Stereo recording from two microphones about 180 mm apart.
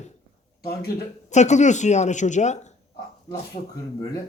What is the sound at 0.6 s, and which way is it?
Speech, 60° left (ahead or behind).